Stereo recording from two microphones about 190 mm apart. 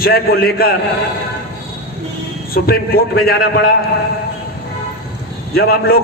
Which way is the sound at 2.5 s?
50° left (ahead or behind).